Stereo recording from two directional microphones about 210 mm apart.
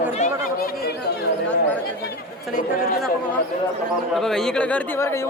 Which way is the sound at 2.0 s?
45° left (ahead or behind).